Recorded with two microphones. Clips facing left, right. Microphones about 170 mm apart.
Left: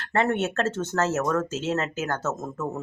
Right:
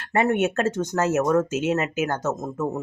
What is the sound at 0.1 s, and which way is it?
Speech, 15° right (ahead or behind).